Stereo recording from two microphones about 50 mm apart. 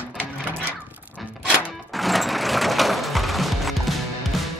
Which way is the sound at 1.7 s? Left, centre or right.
Centre.